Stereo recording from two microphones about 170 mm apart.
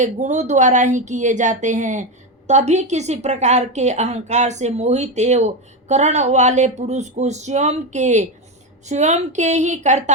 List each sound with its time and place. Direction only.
0.0 s a woman's voice: 45° right (ahead or behind)